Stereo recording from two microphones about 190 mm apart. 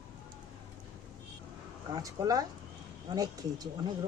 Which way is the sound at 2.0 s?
20° right (ahead or behind).